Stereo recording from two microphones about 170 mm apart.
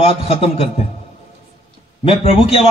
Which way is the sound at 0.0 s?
35° left (ahead or behind).